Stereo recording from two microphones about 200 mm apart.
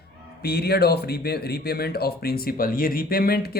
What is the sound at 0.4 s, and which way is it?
Speech, 50° left (ahead or behind).